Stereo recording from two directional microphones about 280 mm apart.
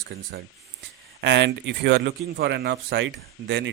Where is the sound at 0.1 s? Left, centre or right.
Right.